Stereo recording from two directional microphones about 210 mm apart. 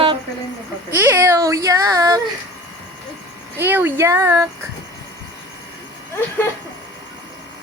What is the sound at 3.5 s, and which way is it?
Speech, 10° right (ahead or behind).